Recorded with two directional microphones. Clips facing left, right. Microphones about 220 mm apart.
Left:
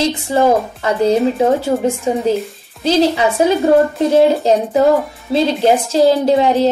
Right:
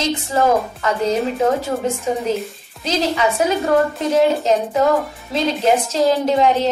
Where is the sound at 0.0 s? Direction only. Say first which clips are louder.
Left 4 dB; 30° left (ahead or behind).